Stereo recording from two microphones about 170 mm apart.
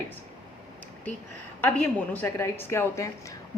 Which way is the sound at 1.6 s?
10° left (ahead or behind).